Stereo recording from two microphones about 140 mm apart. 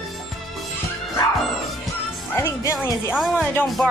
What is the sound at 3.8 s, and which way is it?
Music, 10° left (ahead or behind).